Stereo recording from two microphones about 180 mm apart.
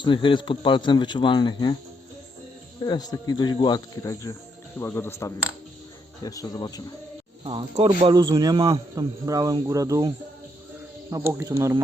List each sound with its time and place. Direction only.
0.0 s speech: 25° left (ahead or behind)
2.8 s speech: 20° left (ahead or behind)
7.4 s a man's voice: 30° right (ahead or behind)
11.1 s speech: 15° right (ahead or behind)